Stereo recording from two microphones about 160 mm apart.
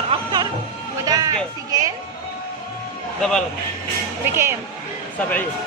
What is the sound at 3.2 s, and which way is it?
Speech, 5° left (ahead or behind).